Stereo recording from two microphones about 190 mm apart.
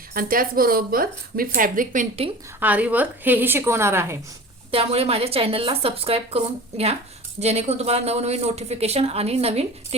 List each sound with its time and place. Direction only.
0.1 s speech: 50° right (ahead or behind)
2.6 s a woman's voice: 10° right (ahead or behind)
4.7 s speech: 30° right (ahead or behind)